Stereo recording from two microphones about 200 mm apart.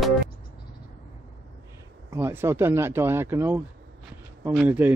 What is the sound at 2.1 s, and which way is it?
Speech, 10° right (ahead or behind).